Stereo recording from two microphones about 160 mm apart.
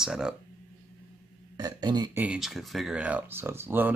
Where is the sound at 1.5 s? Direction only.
25° right (ahead or behind).